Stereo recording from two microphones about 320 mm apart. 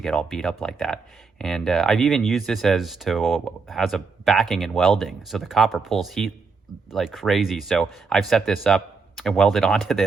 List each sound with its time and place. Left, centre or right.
0.0 s speech: centre